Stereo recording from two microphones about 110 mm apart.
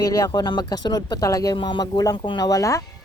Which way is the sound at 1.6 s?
45° left (ahead or behind).